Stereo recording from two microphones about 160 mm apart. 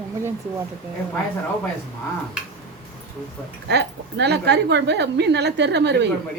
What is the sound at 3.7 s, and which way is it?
A woman's voice, 90° right.